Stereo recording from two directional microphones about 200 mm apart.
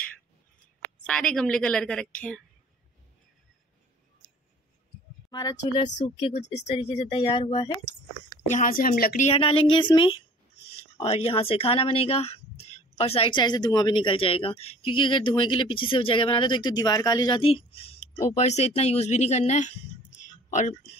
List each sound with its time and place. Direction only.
1.0 s a woman's voice: 5° left (ahead or behind)
5.3 s a woman's voice: 20° left (ahead or behind)
8.5 s a woman's voice: 40° left (ahead or behind)
9.2 s a woman's voice: 30° left (ahead or behind)